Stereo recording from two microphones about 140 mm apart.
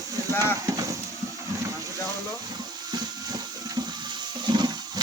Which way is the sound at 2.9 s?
30° right (ahead or behind).